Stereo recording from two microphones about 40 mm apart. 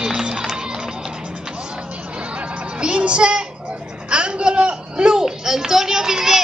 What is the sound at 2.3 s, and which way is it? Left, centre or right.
Music, right.